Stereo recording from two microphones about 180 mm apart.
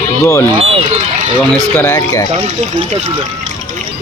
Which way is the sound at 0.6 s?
35° right (ahead or behind).